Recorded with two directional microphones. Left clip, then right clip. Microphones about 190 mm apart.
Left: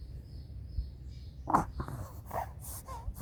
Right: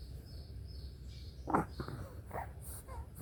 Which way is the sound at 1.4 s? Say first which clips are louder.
Left 5 dB; 20° left (ahead or behind).